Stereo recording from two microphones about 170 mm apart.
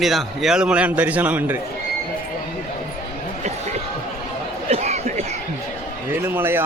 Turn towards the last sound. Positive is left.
turn(degrees=-15)  # may be behind; listen again after turning